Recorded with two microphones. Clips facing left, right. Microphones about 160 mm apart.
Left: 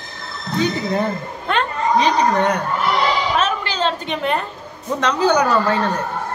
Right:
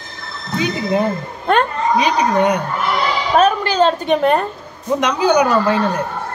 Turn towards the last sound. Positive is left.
turn(degrees=-15)  # may be behind; listen again after turning